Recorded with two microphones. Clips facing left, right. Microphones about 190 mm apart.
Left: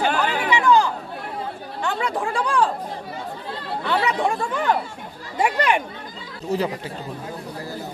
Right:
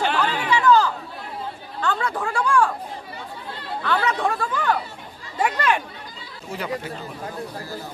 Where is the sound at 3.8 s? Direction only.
20° left (ahead or behind).